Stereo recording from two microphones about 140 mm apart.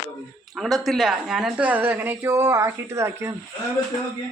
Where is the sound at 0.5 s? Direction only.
Centre (ahead or behind); by 3.3 s 20° right (ahead or behind).